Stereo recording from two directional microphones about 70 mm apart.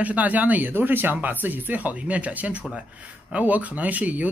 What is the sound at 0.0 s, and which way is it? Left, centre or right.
Speech, right.